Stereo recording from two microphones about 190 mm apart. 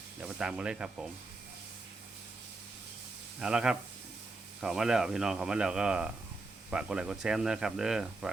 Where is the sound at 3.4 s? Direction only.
5° right (ahead or behind).